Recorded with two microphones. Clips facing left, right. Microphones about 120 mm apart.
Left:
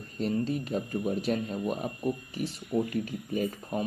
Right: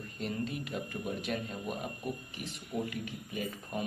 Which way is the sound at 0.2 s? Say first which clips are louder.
Left 7 dB; 35° left (ahead or behind).